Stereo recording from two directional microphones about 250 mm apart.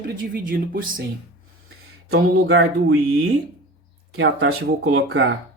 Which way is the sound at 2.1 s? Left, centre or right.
Right.